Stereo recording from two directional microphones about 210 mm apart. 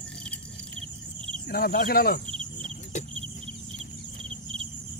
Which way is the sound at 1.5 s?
45° left (ahead or behind).